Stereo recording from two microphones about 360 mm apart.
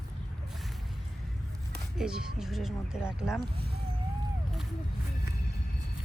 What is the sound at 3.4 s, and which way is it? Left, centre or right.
Speech, right.